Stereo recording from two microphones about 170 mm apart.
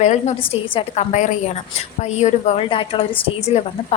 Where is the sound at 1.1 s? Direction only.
45° left (ahead or behind).